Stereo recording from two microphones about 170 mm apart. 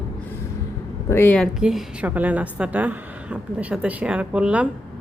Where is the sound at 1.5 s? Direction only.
5° right (ahead or behind).